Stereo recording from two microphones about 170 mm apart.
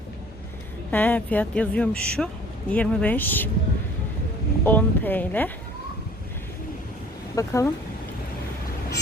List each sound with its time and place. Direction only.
0.9 s speech: 10° left (ahead or behind)
4.6 s speech: 10° left (ahead or behind)
7.3 s speech: 15° left (ahead or behind)